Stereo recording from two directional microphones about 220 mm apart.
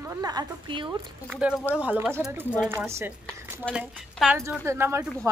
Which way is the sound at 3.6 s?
Centre (ahead or behind).